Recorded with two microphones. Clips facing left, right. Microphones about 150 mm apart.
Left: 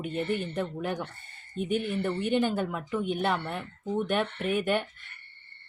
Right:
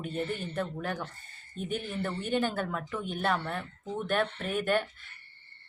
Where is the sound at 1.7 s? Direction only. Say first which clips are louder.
Left 6 dB; 65° left (ahead or behind).